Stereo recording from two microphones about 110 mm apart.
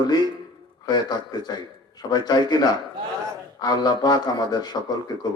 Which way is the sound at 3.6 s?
40° left (ahead or behind).